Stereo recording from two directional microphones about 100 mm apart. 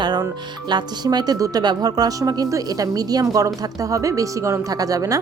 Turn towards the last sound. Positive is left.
turn(degrees=-35)  # may be behind; listen again after turning